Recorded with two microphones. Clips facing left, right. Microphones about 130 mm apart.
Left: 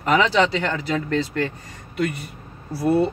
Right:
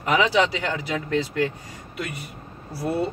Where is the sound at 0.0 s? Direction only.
10° right (ahead or behind).